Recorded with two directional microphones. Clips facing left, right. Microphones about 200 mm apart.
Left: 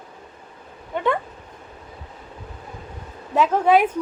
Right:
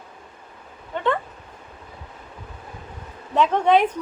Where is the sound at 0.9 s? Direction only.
10° left (ahead or behind).